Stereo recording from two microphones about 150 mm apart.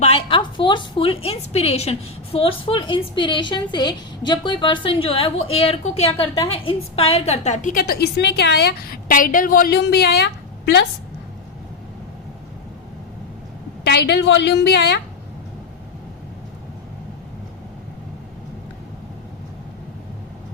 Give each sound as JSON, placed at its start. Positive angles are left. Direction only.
{"t": 0.0, "sound": "a woman's voice", "side_deg": 40}
{"t": 13.8, "sound": "a woman's voice", "side_deg": 90}